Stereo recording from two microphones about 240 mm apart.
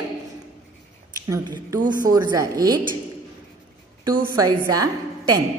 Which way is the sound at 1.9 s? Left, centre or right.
Centre.